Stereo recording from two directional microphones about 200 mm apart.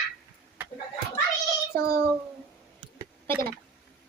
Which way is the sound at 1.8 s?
15° left (ahead or behind).